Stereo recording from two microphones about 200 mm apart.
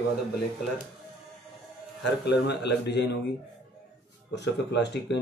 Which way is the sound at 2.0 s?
60° left (ahead or behind).